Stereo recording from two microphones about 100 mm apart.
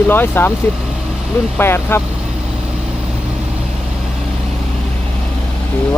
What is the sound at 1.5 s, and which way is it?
Speech, 25° left (ahead or behind).